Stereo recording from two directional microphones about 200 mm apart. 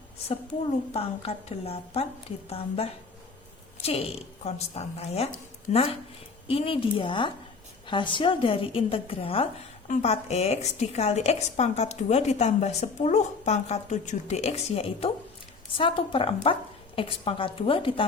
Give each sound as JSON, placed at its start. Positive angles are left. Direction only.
{"t": 0.9, "sound": "a woman's voice", "side_deg": 30}